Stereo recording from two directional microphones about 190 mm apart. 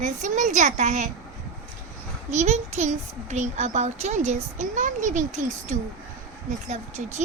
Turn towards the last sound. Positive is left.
turn(degrees=-40)  # may be behind; listen again after turning